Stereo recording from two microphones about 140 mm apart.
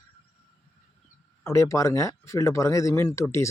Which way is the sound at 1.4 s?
20° left (ahead or behind).